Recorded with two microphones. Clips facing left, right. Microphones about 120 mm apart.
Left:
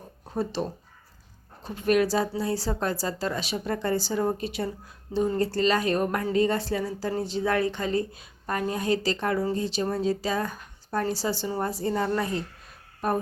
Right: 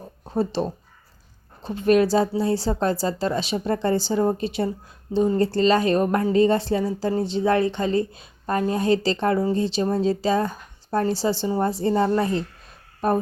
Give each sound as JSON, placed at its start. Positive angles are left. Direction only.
{"t": 0.3, "sound": "a woman's voice", "side_deg": -30}